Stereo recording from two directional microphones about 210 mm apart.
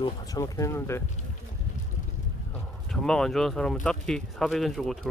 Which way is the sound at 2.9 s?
Centre (ahead or behind).